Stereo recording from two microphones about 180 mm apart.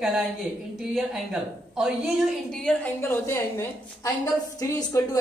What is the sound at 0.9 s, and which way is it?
A woman's voice, centre (ahead or behind).